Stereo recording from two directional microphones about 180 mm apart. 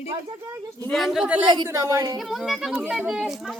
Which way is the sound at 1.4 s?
25° right (ahead or behind).